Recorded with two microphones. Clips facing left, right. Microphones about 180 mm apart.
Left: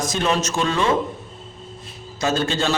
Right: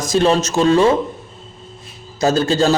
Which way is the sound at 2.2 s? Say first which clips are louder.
Right 6 dB; 35° right (ahead or behind).